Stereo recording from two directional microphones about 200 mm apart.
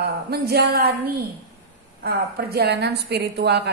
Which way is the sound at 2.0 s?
50° right (ahead or behind).